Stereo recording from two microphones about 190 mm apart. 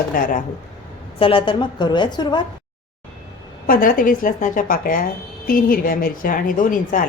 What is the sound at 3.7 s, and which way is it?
A woman's voice, 50° left (ahead or behind).